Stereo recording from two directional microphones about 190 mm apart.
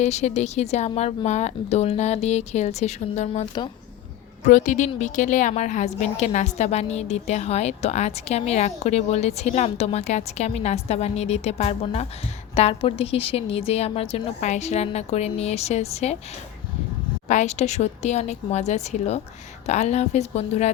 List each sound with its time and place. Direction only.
0.0 s a woman's voice: 35° left (ahead or behind)
4.4 s a woman's voice: 40° left (ahead or behind)
17.2 s a woman's voice: 40° left (ahead or behind)